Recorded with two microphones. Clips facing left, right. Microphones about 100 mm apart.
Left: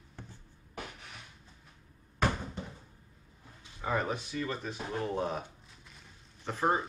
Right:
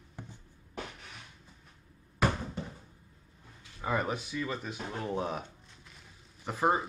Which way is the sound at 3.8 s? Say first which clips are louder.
Even; 5° right (ahead or behind).